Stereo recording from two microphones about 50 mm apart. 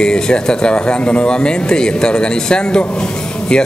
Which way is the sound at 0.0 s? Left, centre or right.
Centre.